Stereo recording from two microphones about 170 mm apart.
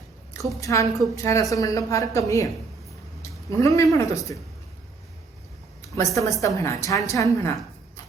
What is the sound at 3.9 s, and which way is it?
Speech, 20° left (ahead or behind).